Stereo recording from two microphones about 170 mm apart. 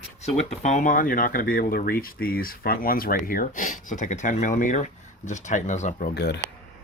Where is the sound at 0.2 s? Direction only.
40° left (ahead or behind); by 6.4 s 75° left (ahead or behind).